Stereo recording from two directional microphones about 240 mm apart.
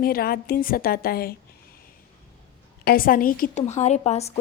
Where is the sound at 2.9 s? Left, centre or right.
Left.